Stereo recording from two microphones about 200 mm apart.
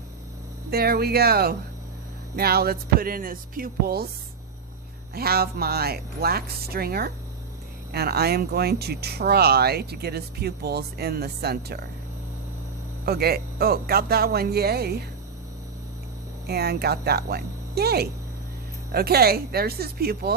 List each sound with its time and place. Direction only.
0.7 s speech: 50° right (ahead or behind)
5.1 s speech: 50° right (ahead or behind)
13.1 s speech: 50° right (ahead or behind)
16.5 s speech: 55° right (ahead or behind)